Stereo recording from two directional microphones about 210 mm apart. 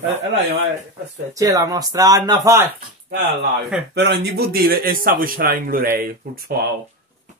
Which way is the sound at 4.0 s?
55° right (ahead or behind).